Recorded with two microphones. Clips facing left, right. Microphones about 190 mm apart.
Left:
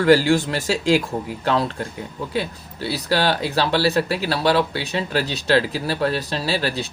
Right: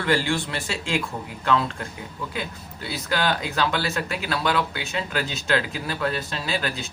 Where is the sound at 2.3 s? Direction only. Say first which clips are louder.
Left 7 dB; 35° left (ahead or behind).